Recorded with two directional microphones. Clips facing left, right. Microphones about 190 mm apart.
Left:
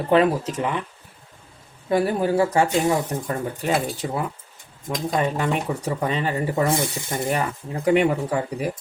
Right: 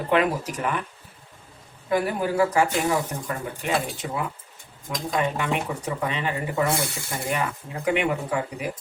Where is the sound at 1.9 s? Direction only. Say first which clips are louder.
Left 4 dB; 30° left (ahead or behind).